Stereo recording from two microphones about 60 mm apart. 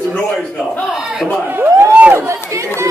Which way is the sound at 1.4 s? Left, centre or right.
Right.